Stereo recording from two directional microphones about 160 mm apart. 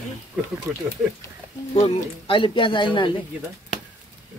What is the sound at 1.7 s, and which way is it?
Speech, 40° left (ahead or behind).